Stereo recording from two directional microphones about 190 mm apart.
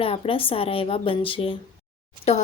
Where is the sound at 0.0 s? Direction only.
30° left (ahead or behind).